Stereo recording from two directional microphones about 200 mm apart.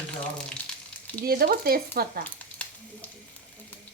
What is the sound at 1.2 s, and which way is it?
Speech, 50° right (ahead or behind).